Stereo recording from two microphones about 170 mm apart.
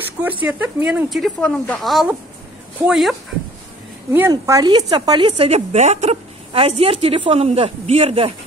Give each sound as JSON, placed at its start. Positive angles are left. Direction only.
{"t": 0.2, "sound": "speech", "side_deg": -10}
{"t": 4.3, "sound": "a woman's voice", "side_deg": -20}